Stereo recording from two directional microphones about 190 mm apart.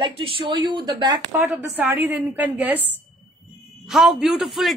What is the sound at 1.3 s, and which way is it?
A woman's voice, 10° right (ahead or behind).